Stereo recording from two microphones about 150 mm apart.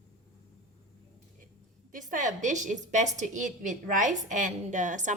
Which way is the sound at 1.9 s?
60° right (ahead or behind).